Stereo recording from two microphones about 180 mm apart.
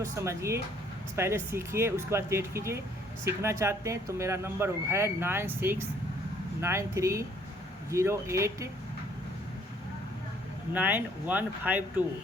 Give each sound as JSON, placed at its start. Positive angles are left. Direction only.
{"t": 0.0, "sound": "speech", "side_deg": -15}
{"t": 10.8, "sound": "speech", "side_deg": -10}